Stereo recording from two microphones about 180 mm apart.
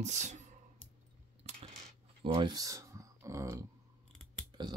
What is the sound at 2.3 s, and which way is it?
Speech, 20° right (ahead or behind).